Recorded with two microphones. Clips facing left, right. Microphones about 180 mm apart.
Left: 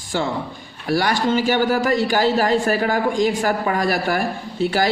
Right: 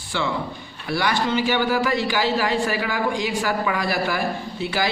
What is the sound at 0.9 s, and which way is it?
A man's voice, 45° left (ahead or behind).